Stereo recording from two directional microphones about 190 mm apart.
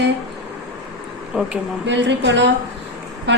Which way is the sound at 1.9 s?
70° right (ahead or behind).